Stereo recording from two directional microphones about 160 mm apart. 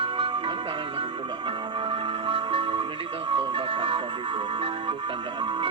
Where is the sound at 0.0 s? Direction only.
30° right (ahead or behind).